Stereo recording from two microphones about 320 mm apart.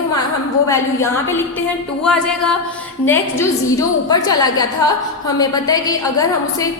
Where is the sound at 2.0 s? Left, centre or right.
Centre.